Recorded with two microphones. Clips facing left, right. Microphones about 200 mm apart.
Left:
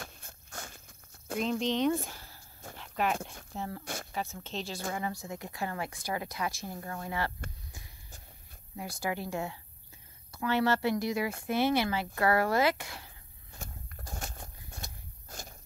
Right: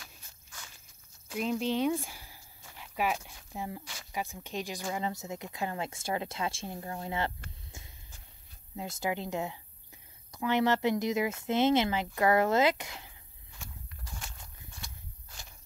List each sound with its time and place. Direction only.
0.0 s walk: 55° left (ahead or behind)
1.4 s speech: 5° right (ahead or behind)
2.0 s a sound: 10° right (ahead or behind)
2.8 s dog: 10° right (ahead or behind)
3.5 s speech: 10° right (ahead or behind)
3.8 s speech: 55° left (ahead or behind)
4.1 s speech: 15° right (ahead or behind)
8.7 s speech: 20° right (ahead or behind)
13.5 s walk: 45° left (ahead or behind)